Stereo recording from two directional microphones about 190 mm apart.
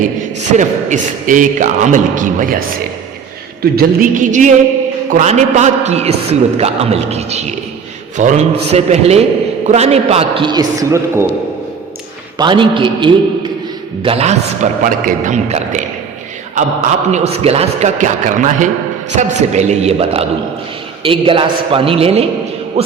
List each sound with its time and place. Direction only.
0.0 s a man's voice: 40° right (ahead or behind); by 11.3 s 15° right (ahead or behind)
12.4 s a man's voice: 25° right (ahead or behind)
17.1 s a man's voice: 35° right (ahead or behind)